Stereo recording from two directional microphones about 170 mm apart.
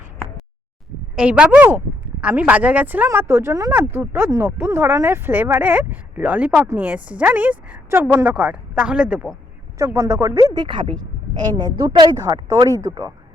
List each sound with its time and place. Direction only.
1.1 s speech: 5° right (ahead or behind)
9.7 s speech: 20° right (ahead or behind)